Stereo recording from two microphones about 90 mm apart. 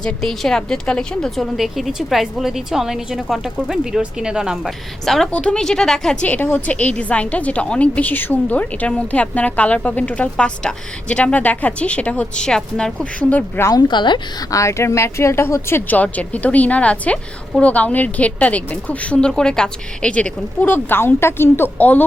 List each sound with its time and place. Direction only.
0.0 s a woman's voice: 5° left (ahead or behind)
1.5 s a woman's voice: centre (ahead or behind)
5.0 s a woman's voice: 5° left (ahead or behind)
6.2 s a woman's voice: 20° left (ahead or behind)
13.6 s a woman's voice: 45° left (ahead or behind)
14.5 s a woman's voice: 35° left (ahead or behind)